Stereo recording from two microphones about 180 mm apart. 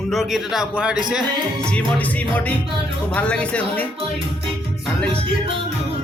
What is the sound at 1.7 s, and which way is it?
Speech, 10° left (ahead or behind).